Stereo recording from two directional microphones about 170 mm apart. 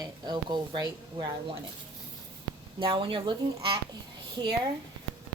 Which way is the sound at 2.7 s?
30° right (ahead or behind).